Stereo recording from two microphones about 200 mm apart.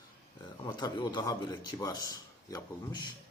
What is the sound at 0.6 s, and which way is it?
A man's voice, 20° left (ahead or behind).